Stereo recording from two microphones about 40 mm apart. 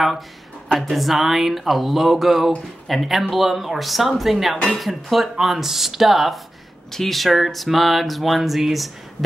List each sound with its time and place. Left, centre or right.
0.7 s speech: centre